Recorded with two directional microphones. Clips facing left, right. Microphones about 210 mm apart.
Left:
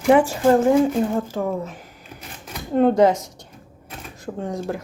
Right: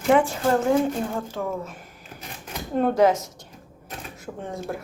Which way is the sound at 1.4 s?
15° left (ahead or behind).